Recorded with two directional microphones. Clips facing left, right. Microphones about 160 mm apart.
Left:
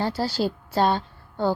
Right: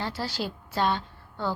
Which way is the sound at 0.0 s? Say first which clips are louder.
Left 7 dB; 35° left (ahead or behind).